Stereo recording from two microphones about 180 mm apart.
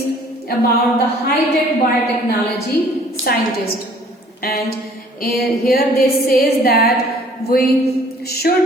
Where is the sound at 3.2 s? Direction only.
55° left (ahead or behind).